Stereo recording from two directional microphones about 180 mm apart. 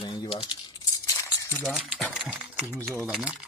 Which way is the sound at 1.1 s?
15° left (ahead or behind).